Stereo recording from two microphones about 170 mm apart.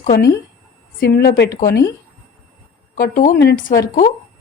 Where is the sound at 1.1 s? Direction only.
65° left (ahead or behind).